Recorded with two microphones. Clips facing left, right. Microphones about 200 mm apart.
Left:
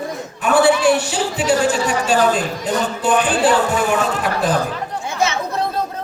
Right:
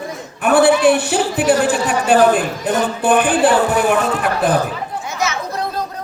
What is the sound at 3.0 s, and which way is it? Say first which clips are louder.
Music: right 3 dB; 55° right (ahead or behind).